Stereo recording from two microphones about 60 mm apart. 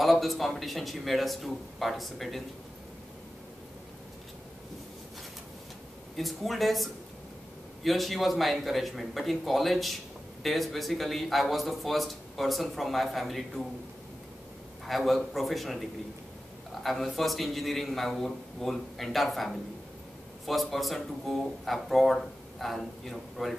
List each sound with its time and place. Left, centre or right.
0.0 s a man's voice: centre
6.1 s a man's voice: centre
14.9 s a man's voice: centre